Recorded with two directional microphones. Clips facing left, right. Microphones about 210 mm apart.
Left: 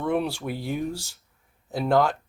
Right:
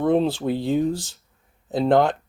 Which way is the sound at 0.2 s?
20° right (ahead or behind).